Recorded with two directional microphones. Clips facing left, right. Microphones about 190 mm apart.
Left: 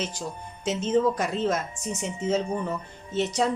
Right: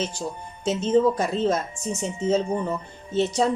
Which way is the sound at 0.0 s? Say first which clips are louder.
Right 3 dB; 30° right (ahead or behind).